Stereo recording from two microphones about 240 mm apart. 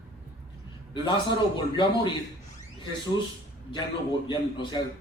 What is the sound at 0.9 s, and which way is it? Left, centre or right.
Speech, centre.